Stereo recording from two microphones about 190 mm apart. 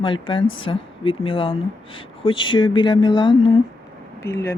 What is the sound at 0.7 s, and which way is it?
Speech, 30° left (ahead or behind).